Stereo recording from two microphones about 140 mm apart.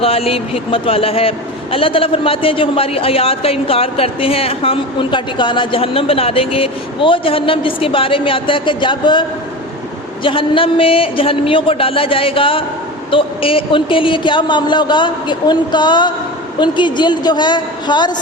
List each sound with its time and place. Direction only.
0.0 s a man's voice: 45° left (ahead or behind)
10.2 s a man's voice: 40° left (ahead or behind)